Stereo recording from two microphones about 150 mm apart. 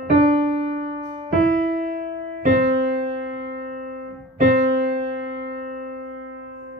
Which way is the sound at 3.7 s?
85° right.